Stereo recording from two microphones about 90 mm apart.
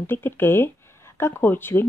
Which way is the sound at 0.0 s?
25° left (ahead or behind).